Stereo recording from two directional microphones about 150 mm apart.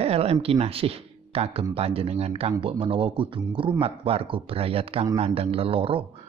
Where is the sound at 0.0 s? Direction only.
40° right (ahead or behind).